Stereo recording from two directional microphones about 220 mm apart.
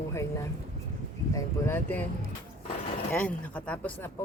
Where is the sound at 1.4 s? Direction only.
10° left (ahead or behind).